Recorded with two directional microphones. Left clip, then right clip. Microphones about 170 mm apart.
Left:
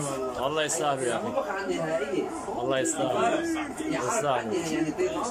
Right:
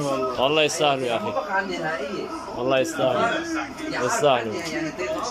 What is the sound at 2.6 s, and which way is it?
Speech, 5° right (ahead or behind).